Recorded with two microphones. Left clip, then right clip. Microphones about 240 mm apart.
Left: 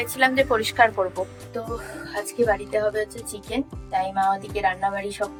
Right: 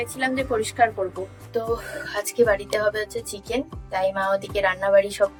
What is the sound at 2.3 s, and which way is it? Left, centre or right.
Speech, centre.